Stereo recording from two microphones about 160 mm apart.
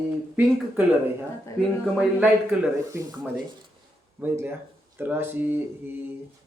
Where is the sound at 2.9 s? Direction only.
20° right (ahead or behind).